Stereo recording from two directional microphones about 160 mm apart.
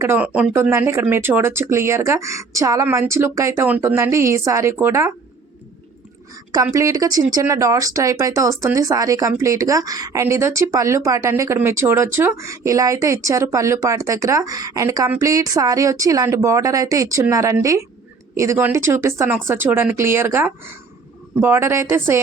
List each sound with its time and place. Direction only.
0.0 s speech: 10° right (ahead or behind)
6.5 s speech: 20° right (ahead or behind)